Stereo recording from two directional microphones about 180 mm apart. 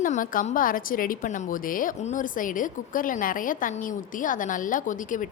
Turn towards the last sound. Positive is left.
turn(degrees=45)  # may be behind; listen again after turning